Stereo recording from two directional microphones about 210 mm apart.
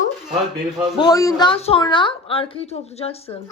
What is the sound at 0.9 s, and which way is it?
Speech, 20° left (ahead or behind).